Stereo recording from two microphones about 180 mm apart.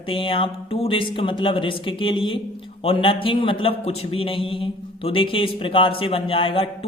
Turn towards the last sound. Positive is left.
turn(degrees=30)  # may be behind; listen again after turning